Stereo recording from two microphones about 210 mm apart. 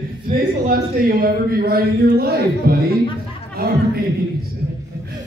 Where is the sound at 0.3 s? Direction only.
45° right (ahead or behind).